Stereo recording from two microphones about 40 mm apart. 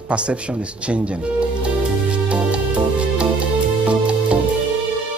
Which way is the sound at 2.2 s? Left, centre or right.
Right.